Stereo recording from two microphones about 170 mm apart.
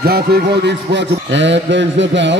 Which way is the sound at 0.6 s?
90° right.